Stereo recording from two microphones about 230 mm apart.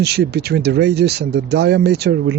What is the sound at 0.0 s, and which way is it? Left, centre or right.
Speech, right.